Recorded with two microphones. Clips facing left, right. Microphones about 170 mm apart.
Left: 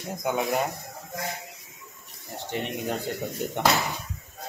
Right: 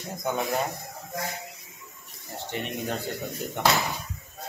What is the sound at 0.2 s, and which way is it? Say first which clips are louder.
Speech: left 2 dB; 20° left (ahead or behind).